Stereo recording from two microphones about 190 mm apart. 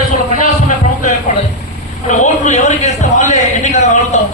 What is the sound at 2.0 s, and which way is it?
A man's voice, 40° left (ahead or behind).